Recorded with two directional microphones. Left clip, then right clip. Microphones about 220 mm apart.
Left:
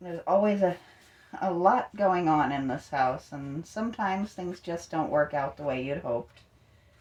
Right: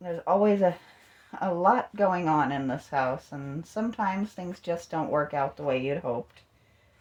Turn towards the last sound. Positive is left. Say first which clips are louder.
# right 3 dB
turn(degrees=-40)  # may be behind; listen again after turning